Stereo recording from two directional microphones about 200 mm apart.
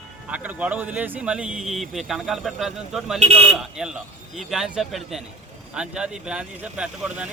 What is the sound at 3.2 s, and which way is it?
Speech, 30° right (ahead or behind).